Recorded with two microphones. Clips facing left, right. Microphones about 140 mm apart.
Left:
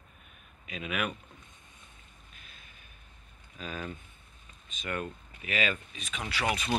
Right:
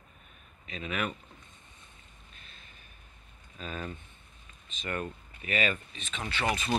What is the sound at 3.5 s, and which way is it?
Speech, centre (ahead or behind).